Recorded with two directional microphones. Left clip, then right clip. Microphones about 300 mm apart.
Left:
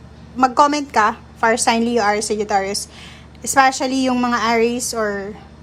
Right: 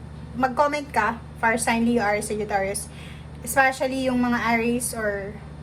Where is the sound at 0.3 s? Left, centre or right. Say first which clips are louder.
Left 7 dB; centre.